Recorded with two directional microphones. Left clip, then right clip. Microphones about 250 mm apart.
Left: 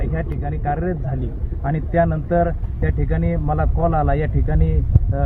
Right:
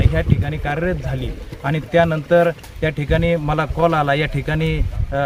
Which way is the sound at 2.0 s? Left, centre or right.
Centre.